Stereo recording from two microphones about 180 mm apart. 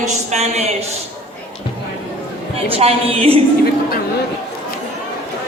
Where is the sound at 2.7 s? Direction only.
35° right (ahead or behind).